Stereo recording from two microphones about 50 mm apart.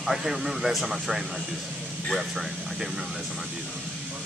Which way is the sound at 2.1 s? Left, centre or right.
Centre.